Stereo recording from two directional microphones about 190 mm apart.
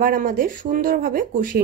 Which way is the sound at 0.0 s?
50° right (ahead or behind).